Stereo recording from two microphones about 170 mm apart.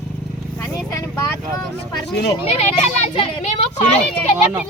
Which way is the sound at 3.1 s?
40° left (ahead or behind).